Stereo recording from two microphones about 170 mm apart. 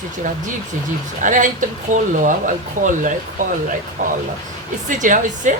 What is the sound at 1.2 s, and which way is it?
Speech, 50° right (ahead or behind).